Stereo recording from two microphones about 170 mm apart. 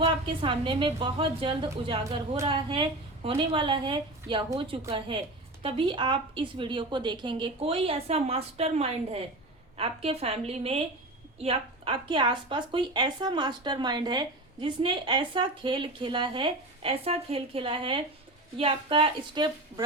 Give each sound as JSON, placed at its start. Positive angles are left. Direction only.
{"t": 0.0, "sound": "a woman's voice", "side_deg": -30}